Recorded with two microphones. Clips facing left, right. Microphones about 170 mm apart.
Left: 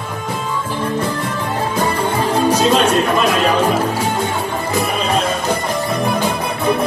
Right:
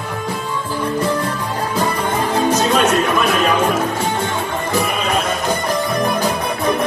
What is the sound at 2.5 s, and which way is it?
Music, 30° left (ahead or behind).